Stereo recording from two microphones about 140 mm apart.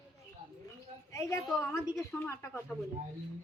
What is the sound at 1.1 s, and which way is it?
A woman's voice, 20° left (ahead or behind).